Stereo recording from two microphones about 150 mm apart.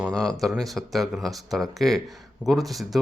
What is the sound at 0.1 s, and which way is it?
Speech, 25° right (ahead or behind).